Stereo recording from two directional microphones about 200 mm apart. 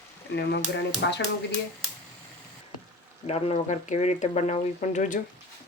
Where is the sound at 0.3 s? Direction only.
55° left (ahead or behind).